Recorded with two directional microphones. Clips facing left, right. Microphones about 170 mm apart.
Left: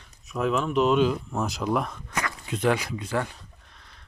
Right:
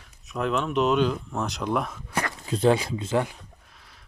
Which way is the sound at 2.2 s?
35° right (ahead or behind).